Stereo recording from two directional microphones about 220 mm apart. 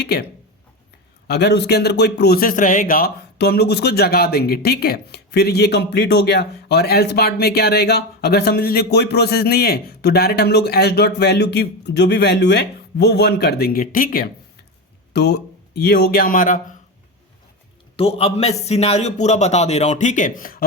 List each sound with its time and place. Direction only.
0.0 s speech: 45° left (ahead or behind)
1.3 s speech: 50° left (ahead or behind)
17.9 s a man's voice: 25° left (ahead or behind)